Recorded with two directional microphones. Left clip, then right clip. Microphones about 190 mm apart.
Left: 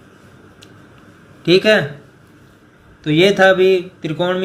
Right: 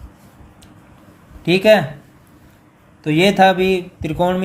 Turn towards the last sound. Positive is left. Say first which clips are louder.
# right 1 dB
turn(degrees=-35)  # may be behind; listen again after turning